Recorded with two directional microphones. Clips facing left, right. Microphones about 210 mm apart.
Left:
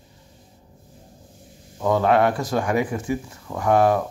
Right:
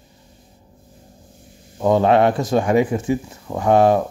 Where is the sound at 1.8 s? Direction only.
25° right (ahead or behind).